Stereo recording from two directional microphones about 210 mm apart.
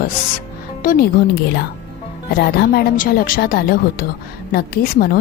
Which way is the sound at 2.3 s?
45° left (ahead or behind).